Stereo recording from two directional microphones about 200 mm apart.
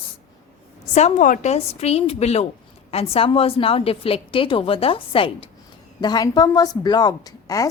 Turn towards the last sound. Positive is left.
turn(degrees=15)  # may be behind; listen again after turning